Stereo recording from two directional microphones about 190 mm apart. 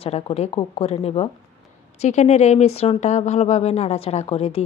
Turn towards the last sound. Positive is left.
turn(degrees=30)  # may be behind; listen again after turning